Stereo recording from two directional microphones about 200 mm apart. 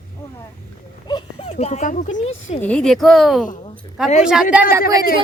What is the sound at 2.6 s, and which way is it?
Speech, 5° left (ahead or behind).